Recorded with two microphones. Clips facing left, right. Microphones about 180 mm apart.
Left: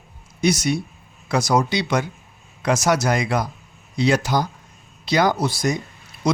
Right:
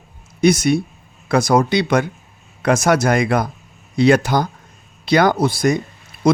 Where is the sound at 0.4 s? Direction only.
55° right (ahead or behind).